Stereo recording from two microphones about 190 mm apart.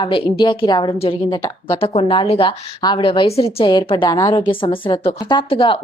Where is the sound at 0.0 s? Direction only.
25° left (ahead or behind).